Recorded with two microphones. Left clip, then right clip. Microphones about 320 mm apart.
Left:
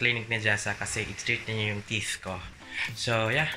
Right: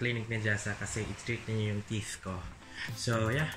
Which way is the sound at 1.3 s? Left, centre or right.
Centre.